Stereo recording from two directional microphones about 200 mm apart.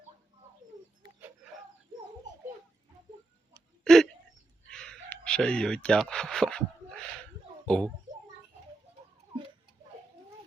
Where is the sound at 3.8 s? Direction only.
Centre (ahead or behind).